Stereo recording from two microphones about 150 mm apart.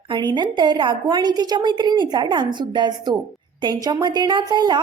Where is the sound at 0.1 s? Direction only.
30° right (ahead or behind).